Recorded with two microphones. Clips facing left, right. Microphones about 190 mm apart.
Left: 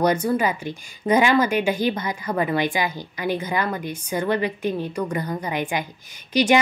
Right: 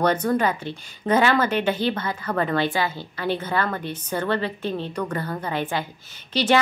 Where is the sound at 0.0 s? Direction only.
10° left (ahead or behind).